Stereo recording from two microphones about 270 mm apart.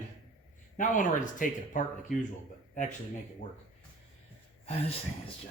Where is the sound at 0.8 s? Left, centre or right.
Left.